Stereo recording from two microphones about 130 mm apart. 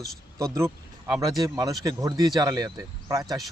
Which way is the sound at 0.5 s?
20° right (ahead or behind).